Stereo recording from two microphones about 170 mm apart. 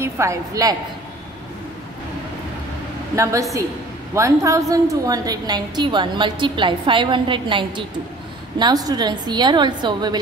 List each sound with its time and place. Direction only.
0.0 s a woman's voice: 15° right (ahead or behind)
3.2 s a woman's voice: 20° right (ahead or behind)